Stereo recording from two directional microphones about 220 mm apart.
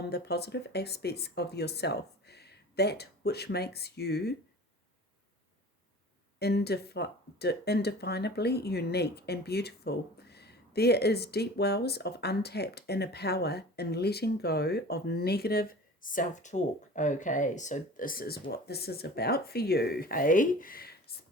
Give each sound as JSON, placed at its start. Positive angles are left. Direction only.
{"t": 0.1, "sound": "speech", "side_deg": 45}
{"t": 6.4, "sound": "speech", "side_deg": 50}